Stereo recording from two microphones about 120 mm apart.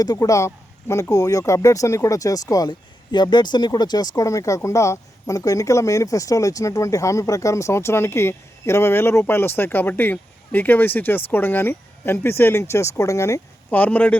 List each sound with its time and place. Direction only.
0.0 s speech: 30° left (ahead or behind)
13.7 s speech: 10° left (ahead or behind)